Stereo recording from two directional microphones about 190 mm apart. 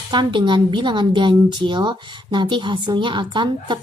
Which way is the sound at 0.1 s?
25° right (ahead or behind).